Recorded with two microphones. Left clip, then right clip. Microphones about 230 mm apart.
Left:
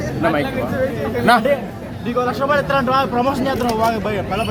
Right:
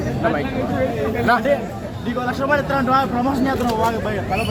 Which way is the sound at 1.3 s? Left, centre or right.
Left.